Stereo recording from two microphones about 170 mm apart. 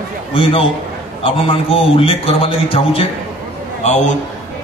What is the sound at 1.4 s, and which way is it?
Speech, 35° left (ahead or behind).